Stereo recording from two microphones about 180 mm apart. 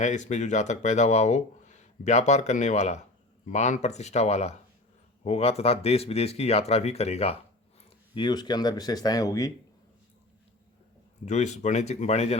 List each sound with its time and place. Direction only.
0.0 s speech: 40° left (ahead or behind)
8.1 s speech: 25° left (ahead or behind)
11.3 s speech: 40° left (ahead or behind)